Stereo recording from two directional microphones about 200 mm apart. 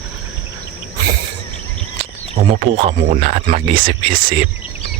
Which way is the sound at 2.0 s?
30° right (ahead or behind).